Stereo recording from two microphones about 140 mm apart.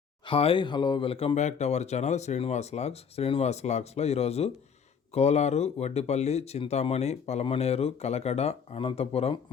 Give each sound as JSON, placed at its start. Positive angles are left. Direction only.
{"t": 0.3, "sound": "speech", "side_deg": 40}